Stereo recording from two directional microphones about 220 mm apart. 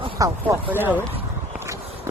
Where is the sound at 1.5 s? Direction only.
10° right (ahead or behind).